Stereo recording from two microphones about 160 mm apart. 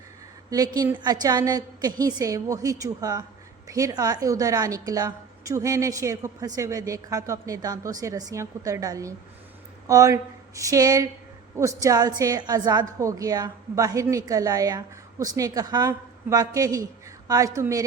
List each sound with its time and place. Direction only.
0.5 s a woman's voice: 25° right (ahead or behind)